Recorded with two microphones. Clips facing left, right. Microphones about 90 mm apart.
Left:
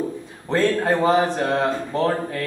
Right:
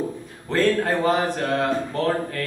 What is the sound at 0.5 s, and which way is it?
Speech, 20° left (ahead or behind).